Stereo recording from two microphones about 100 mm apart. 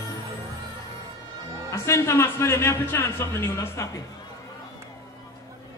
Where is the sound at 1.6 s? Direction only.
30° left (ahead or behind).